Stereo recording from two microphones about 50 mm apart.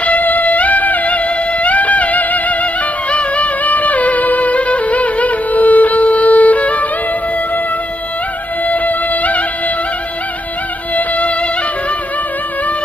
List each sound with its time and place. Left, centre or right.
0.0 s music: left
8.6 s music: left
11.0 s music: left